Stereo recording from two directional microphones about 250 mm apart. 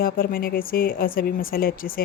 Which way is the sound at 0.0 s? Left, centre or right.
Left.